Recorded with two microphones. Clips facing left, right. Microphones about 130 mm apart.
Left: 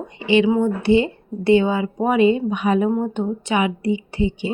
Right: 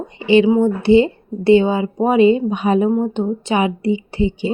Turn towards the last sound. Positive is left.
turn(degrees=-30)  # may be behind; listen again after turning